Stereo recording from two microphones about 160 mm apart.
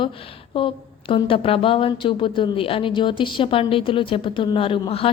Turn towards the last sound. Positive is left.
turn(degrees=35)  # may be behind; listen again after turning